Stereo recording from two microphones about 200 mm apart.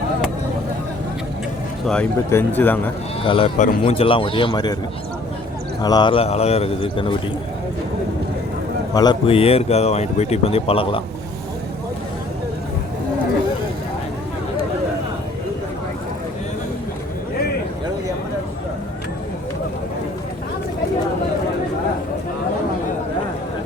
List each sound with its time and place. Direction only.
1.9 s speech: 5° left (ahead or behind)
3.2 s speech: 25° left (ahead or behind)
5.8 s speech: 20° left (ahead or behind)
8.9 s speech: 20° left (ahead or behind)